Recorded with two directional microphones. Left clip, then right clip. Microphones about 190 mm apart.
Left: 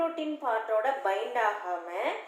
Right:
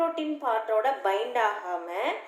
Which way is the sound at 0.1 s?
30° right (ahead or behind).